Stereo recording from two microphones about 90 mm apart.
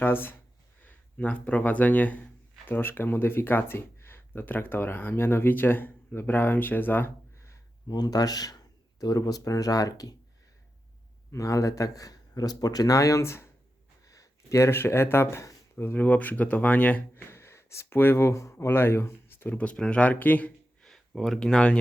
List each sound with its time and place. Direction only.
0.0 s speech: 25° left (ahead or behind)
7.9 s speech: 50° left (ahead or behind)
11.3 s a man's voice: 35° left (ahead or behind)
14.0 s speech: 40° left (ahead or behind); by 17.2 s 15° left (ahead or behind)
17.2 s speech: 30° left (ahead or behind)
20.8 s speech: 5° left (ahead or behind)